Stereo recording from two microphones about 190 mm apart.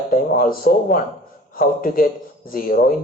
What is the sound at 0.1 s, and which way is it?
A man's voice, 50° left (ahead or behind).